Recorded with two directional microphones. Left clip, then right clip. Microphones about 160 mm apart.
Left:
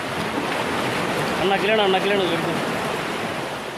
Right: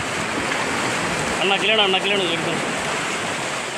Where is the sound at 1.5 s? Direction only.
5° right (ahead or behind).